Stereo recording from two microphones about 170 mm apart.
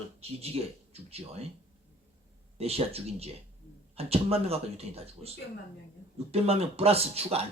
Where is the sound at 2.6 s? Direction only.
35° right (ahead or behind).